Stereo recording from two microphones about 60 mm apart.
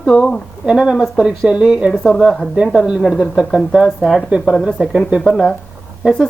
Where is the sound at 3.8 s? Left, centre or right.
Centre.